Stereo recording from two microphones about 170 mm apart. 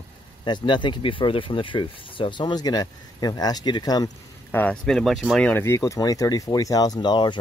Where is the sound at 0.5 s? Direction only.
25° left (ahead or behind).